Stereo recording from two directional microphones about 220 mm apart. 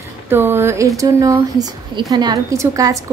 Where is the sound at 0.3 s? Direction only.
10° right (ahead or behind).